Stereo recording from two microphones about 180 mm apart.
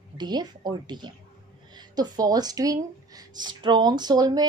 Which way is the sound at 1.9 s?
20° right (ahead or behind).